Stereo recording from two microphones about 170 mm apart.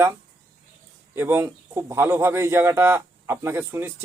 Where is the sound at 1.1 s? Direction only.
15° right (ahead or behind).